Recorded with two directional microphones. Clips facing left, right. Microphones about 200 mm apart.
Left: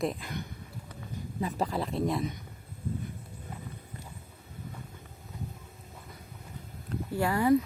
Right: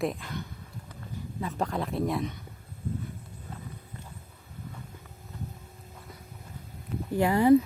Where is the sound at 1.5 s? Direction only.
Centre (ahead or behind).